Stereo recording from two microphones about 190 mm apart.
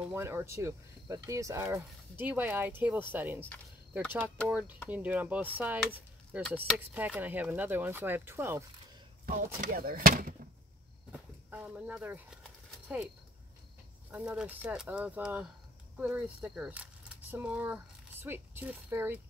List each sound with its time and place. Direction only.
0.1 s speech: 10° right (ahead or behind)
4.5 s speech: 10° right (ahead or behind)
6.8 s speech: 10° right (ahead or behind)
9.2 s speech: 45° right (ahead or behind)
11.1 s speech: 10° right (ahead or behind)
12.7 s a sound: centre (ahead or behind)
14.1 s speech: 5° right (ahead or behind)